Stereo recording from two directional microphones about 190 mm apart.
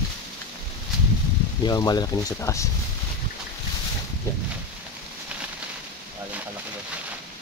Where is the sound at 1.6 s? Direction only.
20° left (ahead or behind).